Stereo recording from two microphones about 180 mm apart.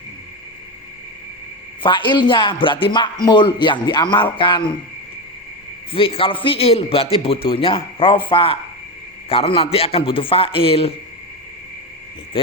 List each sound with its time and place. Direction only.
1.8 s a man's voice: 25° left (ahead or behind)
5.9 s a man's voice: 30° left (ahead or behind)